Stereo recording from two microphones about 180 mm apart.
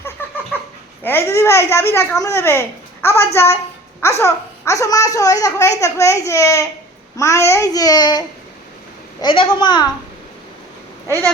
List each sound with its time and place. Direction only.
0.2 s a sound: 10° left (ahead or behind)
1.0 s a child's voice: 15° left (ahead or behind)
9.2 s a child's voice: 25° left (ahead or behind)